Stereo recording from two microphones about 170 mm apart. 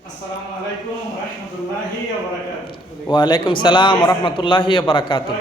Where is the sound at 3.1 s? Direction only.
25° left (ahead or behind).